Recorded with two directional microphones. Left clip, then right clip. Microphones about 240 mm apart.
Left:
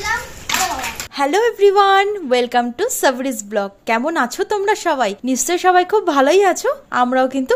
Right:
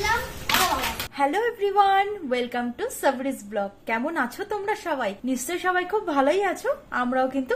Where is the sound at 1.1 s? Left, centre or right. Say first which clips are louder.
Left 9 dB; left.